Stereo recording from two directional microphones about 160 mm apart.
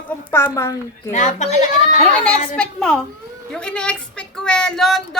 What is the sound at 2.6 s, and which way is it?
Speech, 5° left (ahead or behind).